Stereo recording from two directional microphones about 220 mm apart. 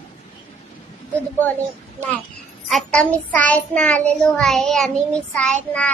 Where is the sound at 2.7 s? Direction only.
5° left (ahead or behind).